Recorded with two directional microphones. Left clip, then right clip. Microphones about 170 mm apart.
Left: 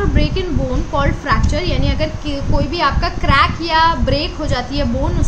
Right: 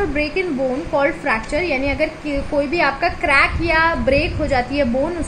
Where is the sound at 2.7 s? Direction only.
20° right (ahead or behind).